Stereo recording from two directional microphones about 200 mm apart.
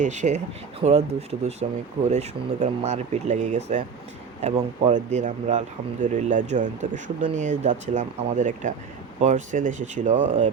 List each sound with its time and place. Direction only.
0.0 s speech: 35° right (ahead or behind)